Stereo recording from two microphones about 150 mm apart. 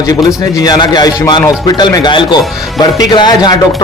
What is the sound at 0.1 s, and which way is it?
A man's voice, 25° left (ahead or behind).